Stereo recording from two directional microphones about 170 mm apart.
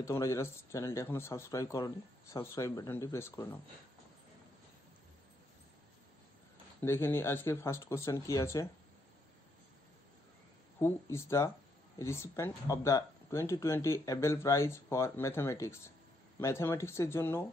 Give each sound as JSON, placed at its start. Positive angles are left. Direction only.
{"t": 0.0, "sound": "speech", "side_deg": 15}
{"t": 6.8, "sound": "speech", "side_deg": 15}
{"t": 10.8, "sound": "speech", "side_deg": 15}